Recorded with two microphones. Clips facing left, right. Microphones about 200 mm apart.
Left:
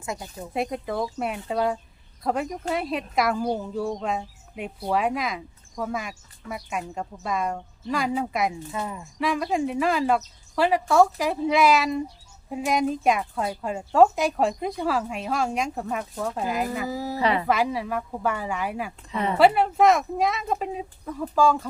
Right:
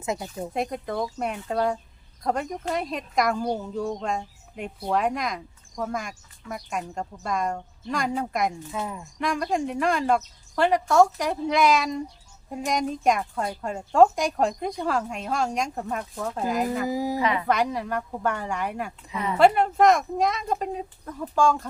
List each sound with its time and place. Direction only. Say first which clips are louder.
0.0 s speech: right 4 dB; 20° right (ahead or behind)
0.5 s a woman's voice: left 2 dB; centre (ahead or behind)
16.9 s speech: right 3 dB; 15° right (ahead or behind)
17.2 s a woman's voice: left 1 dB; 35° left (ahead or behind)
17.4 s a woman's voice: left 1 dB; 5° left (ahead or behind)